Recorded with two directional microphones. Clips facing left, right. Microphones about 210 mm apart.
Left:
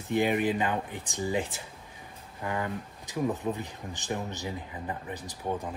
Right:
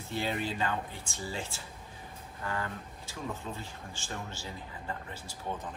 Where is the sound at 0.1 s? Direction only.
15° left (ahead or behind).